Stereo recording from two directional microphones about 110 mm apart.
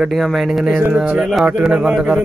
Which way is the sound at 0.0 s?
Centre (ahead or behind).